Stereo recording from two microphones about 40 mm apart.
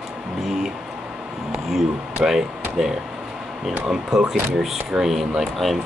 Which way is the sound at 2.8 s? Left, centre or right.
Centre.